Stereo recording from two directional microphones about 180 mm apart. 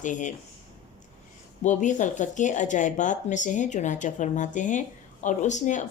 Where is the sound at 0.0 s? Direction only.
45° left (ahead or behind).